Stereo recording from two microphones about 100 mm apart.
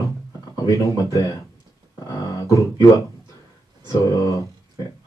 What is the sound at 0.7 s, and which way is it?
Speech, 30° left (ahead or behind).